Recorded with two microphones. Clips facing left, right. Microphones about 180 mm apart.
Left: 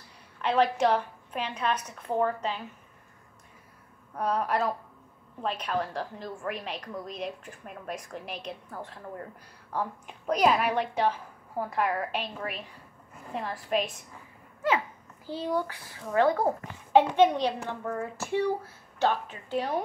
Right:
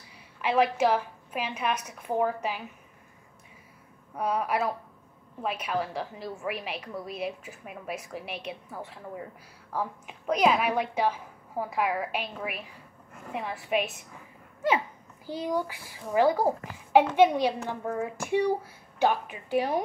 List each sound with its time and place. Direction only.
0.4 s a woman's voice: 5° right (ahead or behind)
4.1 s a woman's voice: 10° right (ahead or behind)
15.2 s a woman's voice: 15° right (ahead or behind)